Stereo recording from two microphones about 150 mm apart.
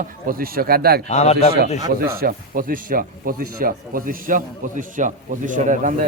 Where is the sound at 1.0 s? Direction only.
45° left (ahead or behind).